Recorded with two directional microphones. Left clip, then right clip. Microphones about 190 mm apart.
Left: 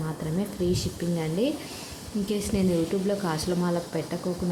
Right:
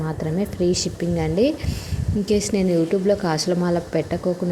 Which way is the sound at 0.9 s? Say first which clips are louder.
Right 6 dB; 15° right (ahead or behind).